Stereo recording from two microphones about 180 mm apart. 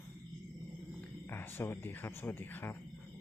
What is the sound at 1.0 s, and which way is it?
Speech, 10° left (ahead or behind).